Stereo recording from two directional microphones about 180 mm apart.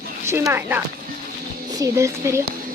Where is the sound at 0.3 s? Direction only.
15° right (ahead or behind).